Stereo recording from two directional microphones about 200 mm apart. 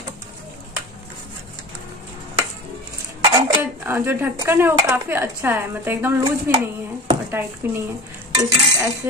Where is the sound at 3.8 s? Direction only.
10° right (ahead or behind).